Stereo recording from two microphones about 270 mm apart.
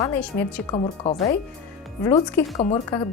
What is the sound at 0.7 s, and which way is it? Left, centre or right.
Speech, left.